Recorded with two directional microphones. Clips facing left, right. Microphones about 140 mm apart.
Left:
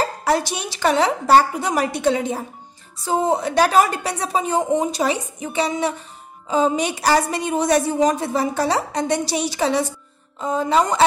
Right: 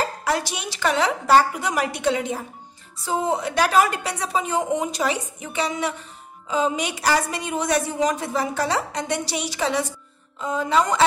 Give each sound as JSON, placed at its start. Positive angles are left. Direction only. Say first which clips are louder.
{"t": 0.2, "sound": "a woman's voice", "louder": "left 4 dB", "side_deg": 30}